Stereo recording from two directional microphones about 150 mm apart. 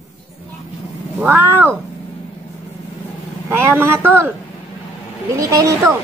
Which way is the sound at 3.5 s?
15° right (ahead or behind).